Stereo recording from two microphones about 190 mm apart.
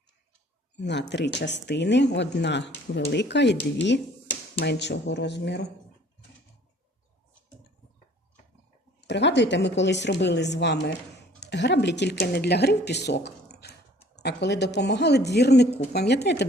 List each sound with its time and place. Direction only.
0.8 s speech: 65° left (ahead or behind)
9.0 s speech: 65° left (ahead or behind)